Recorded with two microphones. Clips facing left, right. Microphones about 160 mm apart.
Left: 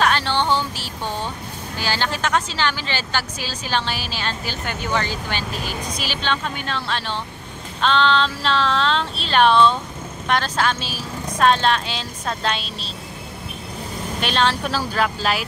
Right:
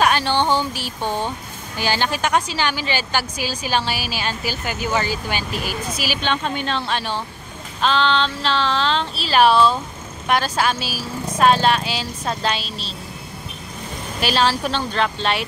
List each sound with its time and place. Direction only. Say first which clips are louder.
0.0 s a sound: right 2 dB; 15° right (ahead or behind)
1.8 s a woman's voice: right 3 dB; 15° right (ahead or behind)
6.4 s speech: right 4 dB; 25° right (ahead or behind)
6.9 s a woman's voice: right 2 dB; 15° right (ahead or behind)
7.8 s female singing: even; centre (ahead or behind)
10.2 s a woman's voice: right 1 dB; 10° right (ahead or behind)
14.2 s female singing: right 2 dB; 5° right (ahead or behind)